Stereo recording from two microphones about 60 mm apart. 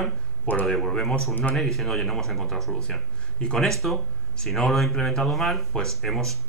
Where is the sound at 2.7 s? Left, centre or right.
Centre.